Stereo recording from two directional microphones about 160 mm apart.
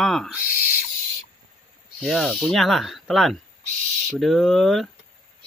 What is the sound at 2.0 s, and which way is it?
Speech, centre (ahead or behind).